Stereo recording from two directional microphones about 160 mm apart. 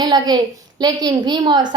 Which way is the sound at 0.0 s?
25° right (ahead or behind).